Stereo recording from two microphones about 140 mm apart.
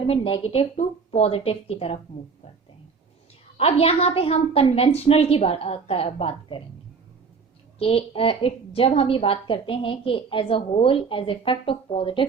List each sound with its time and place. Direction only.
0.1 s a woman's voice: 45° left (ahead or behind)
3.6 s a woman's voice: 45° left (ahead or behind)
7.8 s a woman's voice: 40° left (ahead or behind)